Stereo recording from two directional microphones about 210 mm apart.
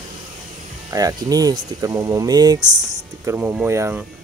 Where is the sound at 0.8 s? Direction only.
15° right (ahead or behind).